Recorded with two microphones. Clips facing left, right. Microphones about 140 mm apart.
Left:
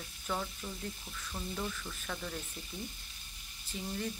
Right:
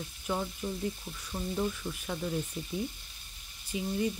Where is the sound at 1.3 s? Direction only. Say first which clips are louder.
Right 7 dB; 20° right (ahead or behind).